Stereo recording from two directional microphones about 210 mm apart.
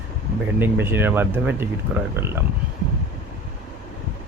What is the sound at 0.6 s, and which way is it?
Speech, 10° right (ahead or behind).